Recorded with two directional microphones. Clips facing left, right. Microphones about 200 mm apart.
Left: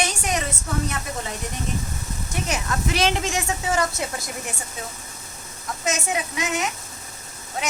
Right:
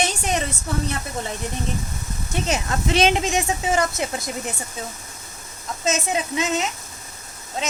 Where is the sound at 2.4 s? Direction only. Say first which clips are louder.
Right 3 dB; 25° right (ahead or behind).